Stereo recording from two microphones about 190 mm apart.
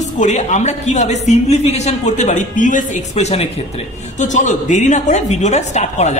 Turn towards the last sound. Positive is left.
turn(degrees=35)  # may be behind; listen again after turning